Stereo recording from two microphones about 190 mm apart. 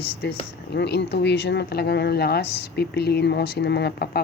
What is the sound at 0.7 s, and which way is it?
Speech, 60° left (ahead or behind).